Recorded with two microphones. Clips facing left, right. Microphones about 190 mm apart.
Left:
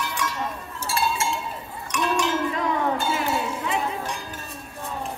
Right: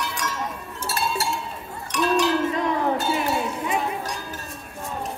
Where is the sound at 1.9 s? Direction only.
35° right (ahead or behind).